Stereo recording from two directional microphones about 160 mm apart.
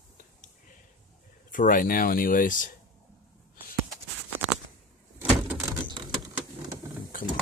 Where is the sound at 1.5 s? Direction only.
55° left (ahead or behind).